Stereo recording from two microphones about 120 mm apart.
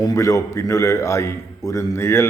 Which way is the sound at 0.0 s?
25° left (ahead or behind).